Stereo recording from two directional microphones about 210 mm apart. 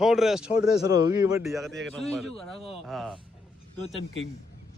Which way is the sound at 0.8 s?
20° right (ahead or behind).